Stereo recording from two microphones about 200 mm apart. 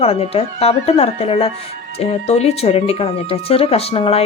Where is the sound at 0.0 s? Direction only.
30° left (ahead or behind).